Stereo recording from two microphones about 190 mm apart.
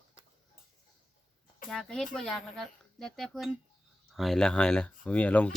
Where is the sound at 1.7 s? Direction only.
5° left (ahead or behind).